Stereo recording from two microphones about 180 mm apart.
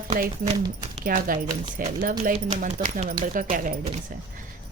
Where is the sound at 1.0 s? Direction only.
50° right (ahead or behind).